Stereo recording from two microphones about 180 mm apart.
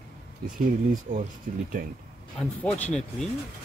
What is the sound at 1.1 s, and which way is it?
Speech, 40° right (ahead or behind).